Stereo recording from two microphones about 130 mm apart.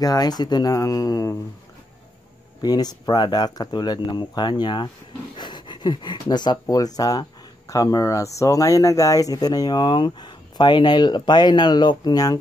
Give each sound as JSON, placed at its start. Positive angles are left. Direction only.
{"t": 0.0, "sound": "speech", "side_deg": 30}
{"t": 2.6, "sound": "speech", "side_deg": 30}